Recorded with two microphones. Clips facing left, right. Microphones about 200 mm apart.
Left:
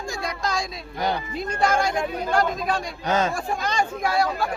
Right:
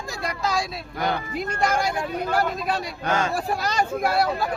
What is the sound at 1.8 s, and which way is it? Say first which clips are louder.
Speech: left 1 dB; 10° right (ahead or behind).